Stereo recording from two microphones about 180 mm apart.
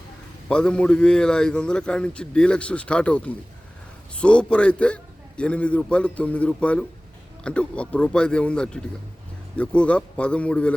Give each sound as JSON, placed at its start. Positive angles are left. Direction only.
{"t": 0.4, "sound": "a man's voice", "side_deg": 5}